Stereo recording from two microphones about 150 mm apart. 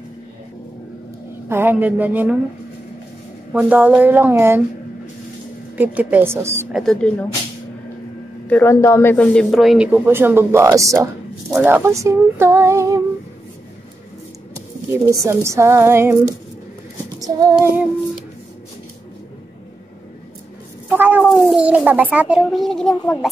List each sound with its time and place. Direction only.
1.5 s speech: 15° right (ahead or behind)
3.5 s speech: 10° right (ahead or behind)
5.8 s speech: 10° right (ahead or behind)
6.7 s a man's voice: 5° left (ahead or behind)
8.5 s a man's voice: 15° left (ahead or behind); by 13.0 s 20° right (ahead or behind)
15.0 s speech: 20° right (ahead or behind)
17.2 s child singing: 25° right (ahead or behind)
20.9 s a sound: 10° right (ahead or behind)
21.2 s a man's voice: centre (ahead or behind)